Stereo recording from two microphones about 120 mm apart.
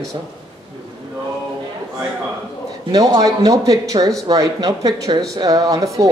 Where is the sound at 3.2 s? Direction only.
30° right (ahead or behind).